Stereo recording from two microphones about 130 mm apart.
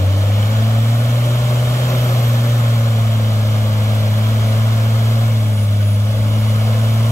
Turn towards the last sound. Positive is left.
turn(degrees=25)  # may be behind; listen again after turning